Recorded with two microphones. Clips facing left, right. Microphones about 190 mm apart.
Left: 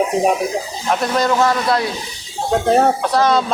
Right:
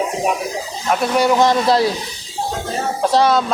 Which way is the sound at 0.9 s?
5° right (ahead or behind).